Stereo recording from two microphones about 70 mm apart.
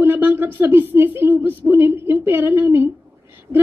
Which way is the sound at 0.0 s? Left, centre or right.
Right.